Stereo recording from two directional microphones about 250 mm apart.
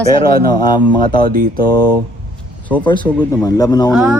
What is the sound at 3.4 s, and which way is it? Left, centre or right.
Speech, centre.